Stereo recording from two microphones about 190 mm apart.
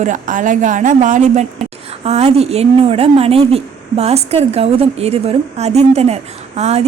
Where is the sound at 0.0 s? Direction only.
40° right (ahead or behind).